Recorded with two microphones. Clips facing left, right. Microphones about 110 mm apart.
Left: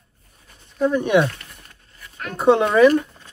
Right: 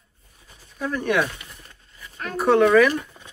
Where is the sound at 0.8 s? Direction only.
20° left (ahead or behind).